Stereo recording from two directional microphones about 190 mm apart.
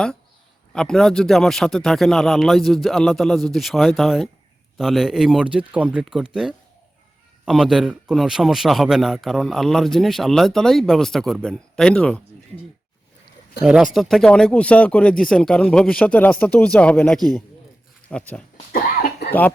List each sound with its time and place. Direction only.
0.7 s a man's voice: 5° left (ahead or behind)
13.7 s a man's voice: centre (ahead or behind)
18.7 s cough: 50° left (ahead or behind)
19.3 s speech: 10° left (ahead or behind)